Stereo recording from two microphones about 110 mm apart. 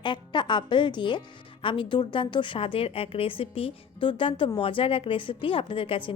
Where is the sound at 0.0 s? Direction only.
45° left (ahead or behind).